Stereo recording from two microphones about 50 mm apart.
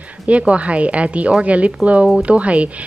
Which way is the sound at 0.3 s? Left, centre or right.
Right.